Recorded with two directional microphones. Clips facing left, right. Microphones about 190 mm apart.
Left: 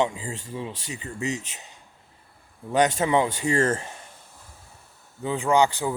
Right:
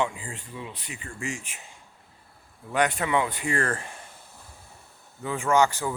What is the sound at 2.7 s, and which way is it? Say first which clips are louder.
Speech: left 4 dB; 25° left (ahead or behind).